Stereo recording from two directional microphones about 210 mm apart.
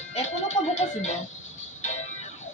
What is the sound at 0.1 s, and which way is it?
Music, 30° left (ahead or behind).